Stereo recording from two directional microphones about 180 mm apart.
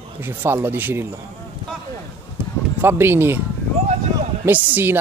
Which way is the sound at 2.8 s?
10° right (ahead or behind).